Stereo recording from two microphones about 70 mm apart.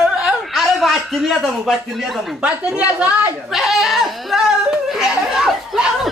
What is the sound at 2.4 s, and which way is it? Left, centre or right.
Speech, centre.